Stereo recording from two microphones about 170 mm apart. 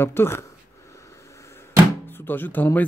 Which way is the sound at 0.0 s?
15° left (ahead or behind).